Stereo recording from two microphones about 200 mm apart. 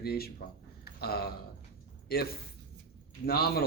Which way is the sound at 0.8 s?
50° left (ahead or behind).